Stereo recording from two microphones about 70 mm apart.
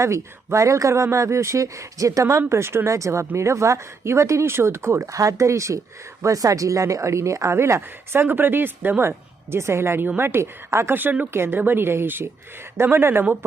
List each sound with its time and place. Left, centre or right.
0.0 s speech: right
2.5 s a woman's voice: right